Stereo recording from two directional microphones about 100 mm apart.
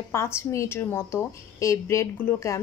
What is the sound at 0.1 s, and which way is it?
Speech, 25° left (ahead or behind).